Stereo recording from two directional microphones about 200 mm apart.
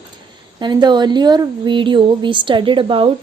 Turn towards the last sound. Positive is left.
turn(degrees=-25)  # may be behind; listen again after turning